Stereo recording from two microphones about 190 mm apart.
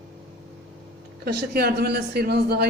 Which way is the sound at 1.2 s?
60° right (ahead or behind).